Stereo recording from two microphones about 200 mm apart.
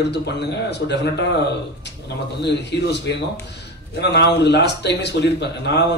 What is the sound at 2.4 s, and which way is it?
Speech, 60° left (ahead or behind).